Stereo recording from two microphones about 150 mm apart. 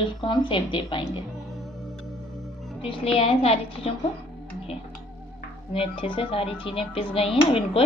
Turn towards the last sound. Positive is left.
turn(degrees=40)  # may be behind; listen again after turning